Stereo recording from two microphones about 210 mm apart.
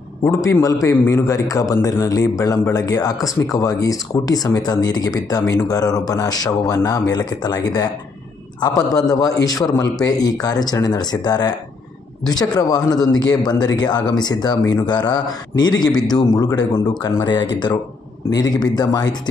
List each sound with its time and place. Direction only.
0.2 s a man's voice: 15° left (ahead or behind)